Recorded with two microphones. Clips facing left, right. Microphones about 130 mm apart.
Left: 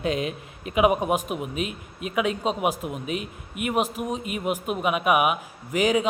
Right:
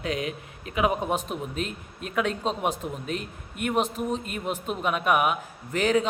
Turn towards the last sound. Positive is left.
turn(degrees=10)  # may be behind; listen again after turning